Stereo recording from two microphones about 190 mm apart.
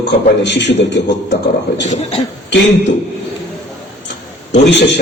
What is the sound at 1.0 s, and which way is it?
Speech, 65° left (ahead or behind).